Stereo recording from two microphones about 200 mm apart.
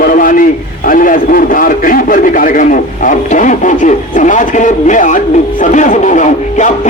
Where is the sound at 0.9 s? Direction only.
45° left (ahead or behind).